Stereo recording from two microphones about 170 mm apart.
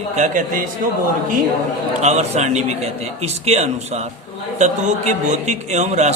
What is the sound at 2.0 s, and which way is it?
A man's voice, 40° right (ahead or behind).